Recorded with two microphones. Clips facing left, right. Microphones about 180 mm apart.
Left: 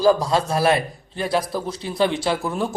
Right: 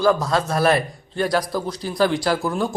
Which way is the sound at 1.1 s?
5° left (ahead or behind).